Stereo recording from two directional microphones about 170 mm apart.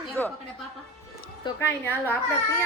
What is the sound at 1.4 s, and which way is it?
Speech, 15° left (ahead or behind).